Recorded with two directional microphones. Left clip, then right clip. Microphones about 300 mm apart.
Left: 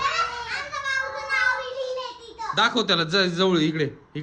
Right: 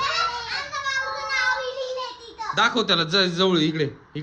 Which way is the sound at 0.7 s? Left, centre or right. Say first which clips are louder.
Even; right.